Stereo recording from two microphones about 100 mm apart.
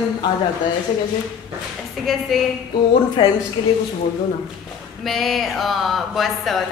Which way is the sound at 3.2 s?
50° left (ahead or behind).